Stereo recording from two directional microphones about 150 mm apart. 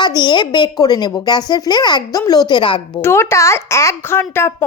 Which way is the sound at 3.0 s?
15° left (ahead or behind).